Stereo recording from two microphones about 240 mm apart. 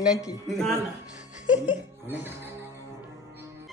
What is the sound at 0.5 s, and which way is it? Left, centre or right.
Speech, centre.